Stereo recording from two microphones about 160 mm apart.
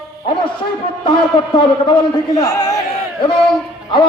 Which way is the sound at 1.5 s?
35° left (ahead or behind).